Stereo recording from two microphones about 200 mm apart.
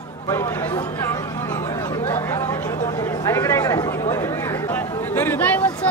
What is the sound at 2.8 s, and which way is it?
Speech, 15° left (ahead or behind).